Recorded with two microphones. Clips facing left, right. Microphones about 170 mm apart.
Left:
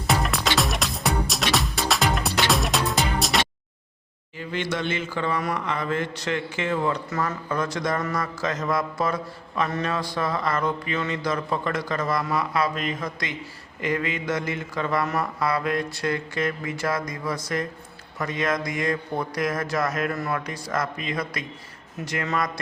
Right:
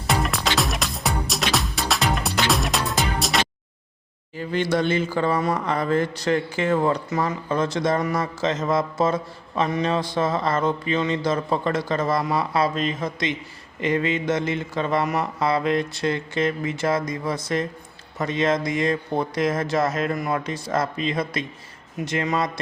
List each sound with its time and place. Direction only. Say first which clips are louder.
0.1 s music: even; centre (ahead or behind)
4.4 s speech: right 6 dB; 40° right (ahead or behind)
7.1 s mantra: right 3 dB; 20° right (ahead or behind)